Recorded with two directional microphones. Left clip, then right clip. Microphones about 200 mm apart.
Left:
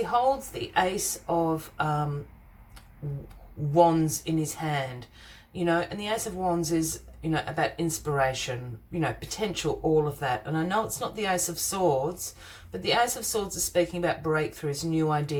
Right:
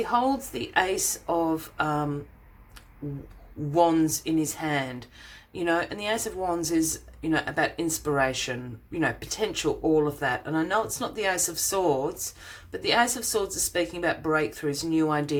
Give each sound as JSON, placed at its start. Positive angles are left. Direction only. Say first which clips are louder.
{"t": 0.0, "sound": "speech", "louder": "even", "side_deg": -35}
{"t": 3.8, "sound": "speech", "louder": "even", "side_deg": -35}